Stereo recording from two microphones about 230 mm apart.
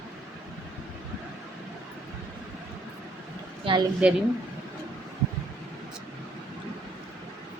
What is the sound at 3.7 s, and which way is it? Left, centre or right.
Speech, right.